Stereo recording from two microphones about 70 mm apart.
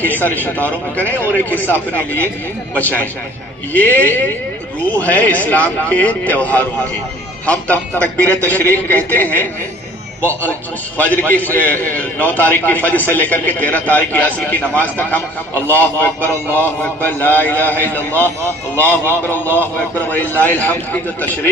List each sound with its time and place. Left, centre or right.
0.0 s a man's voice: left
10.9 s a man's voice: left